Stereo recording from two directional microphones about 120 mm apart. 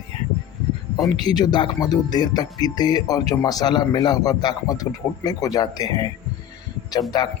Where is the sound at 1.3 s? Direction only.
35° left (ahead or behind).